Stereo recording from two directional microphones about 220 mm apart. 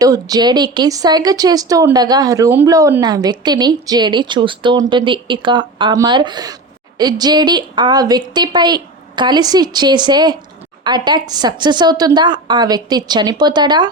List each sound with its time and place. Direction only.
0.0 s a woman's voice: 15° right (ahead or behind)